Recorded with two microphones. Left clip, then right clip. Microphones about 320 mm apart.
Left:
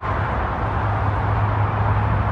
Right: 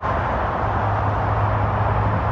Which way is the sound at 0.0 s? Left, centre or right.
Right.